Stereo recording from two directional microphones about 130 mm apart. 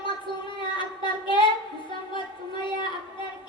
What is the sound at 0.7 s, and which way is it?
Child singing, 40° left (ahead or behind).